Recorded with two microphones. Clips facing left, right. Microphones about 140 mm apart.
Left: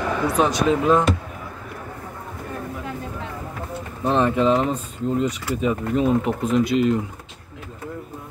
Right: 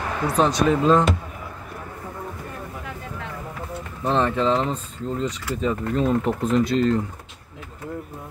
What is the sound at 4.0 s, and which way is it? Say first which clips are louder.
Speech: left 2 dB; 15° left (ahead or behind).